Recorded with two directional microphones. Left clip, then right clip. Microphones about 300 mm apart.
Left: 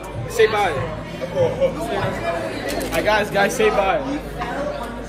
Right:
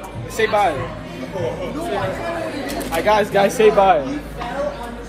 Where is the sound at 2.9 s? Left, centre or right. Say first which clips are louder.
Right 3 dB; centre.